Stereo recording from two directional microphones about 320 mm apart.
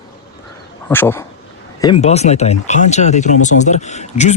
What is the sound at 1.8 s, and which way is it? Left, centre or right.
A man's voice, centre.